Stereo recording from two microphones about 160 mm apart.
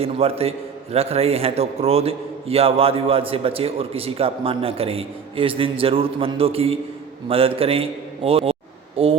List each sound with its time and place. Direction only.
0.0 s a man's voice: 40° right (ahead or behind)